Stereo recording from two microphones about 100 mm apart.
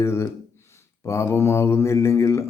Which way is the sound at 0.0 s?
25° left (ahead or behind).